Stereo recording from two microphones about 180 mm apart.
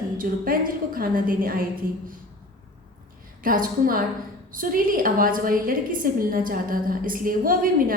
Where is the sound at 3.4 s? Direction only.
50° right (ahead or behind).